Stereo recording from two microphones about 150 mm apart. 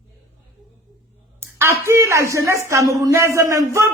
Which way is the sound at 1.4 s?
15° right (ahead or behind).